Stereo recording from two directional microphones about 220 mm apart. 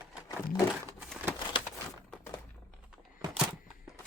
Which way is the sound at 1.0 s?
5° right (ahead or behind).